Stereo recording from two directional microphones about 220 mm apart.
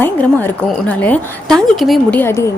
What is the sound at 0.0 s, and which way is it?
A woman's voice, 10° left (ahead or behind).